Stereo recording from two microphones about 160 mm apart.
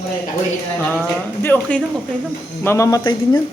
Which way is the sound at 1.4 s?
10° left (ahead or behind).